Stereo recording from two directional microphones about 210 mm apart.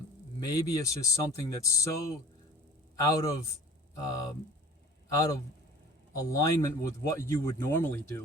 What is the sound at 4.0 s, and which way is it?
Speech, 15° left (ahead or behind).